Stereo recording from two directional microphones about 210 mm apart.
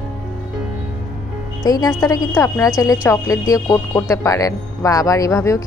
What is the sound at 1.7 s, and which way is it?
Speech, 15° left (ahead or behind).